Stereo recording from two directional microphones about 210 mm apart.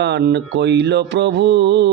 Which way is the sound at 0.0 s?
55° right (ahead or behind).